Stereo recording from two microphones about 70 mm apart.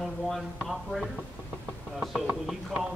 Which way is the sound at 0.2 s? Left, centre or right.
Centre.